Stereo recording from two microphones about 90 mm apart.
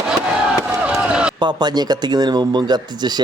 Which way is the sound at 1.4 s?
50° right (ahead or behind).